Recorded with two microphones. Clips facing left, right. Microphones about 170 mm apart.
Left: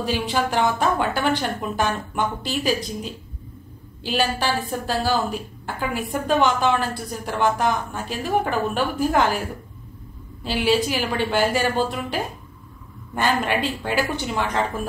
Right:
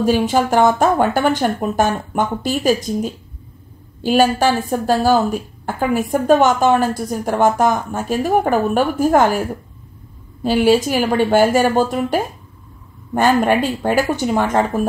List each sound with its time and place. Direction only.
0.0 s a woman's voice: 45° right (ahead or behind)
10.4 s a woman's voice: 45° right (ahead or behind)